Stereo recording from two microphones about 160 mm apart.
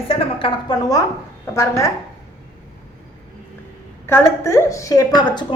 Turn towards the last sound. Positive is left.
turn(degrees=25)  # may be behind; listen again after turning